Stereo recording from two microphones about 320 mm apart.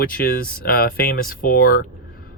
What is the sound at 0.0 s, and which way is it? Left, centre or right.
Speech, left.